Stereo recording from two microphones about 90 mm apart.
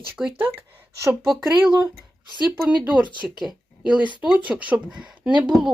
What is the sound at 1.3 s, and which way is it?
Speech, centre (ahead or behind).